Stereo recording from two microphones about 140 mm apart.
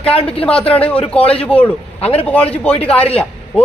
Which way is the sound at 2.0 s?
45° left (ahead or behind).